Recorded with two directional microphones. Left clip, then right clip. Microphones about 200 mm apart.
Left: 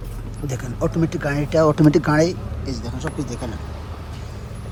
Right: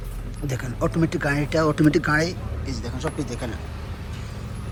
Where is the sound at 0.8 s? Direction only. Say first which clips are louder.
Left 1 dB; 15° left (ahead or behind).